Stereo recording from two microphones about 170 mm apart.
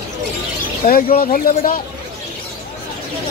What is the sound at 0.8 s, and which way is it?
Speech, 50° left (ahead or behind).